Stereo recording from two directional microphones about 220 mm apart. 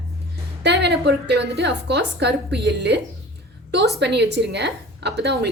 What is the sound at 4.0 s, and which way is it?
A woman's voice, 50° right (ahead or behind).